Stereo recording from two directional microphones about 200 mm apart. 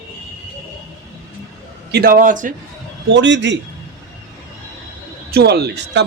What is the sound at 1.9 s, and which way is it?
Speech, 50° right (ahead or behind).